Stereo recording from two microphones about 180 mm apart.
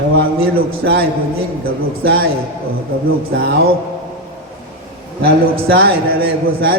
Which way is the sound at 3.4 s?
55° right (ahead or behind).